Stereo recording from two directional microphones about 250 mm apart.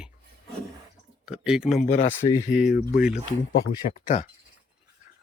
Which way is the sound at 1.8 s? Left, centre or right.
Left.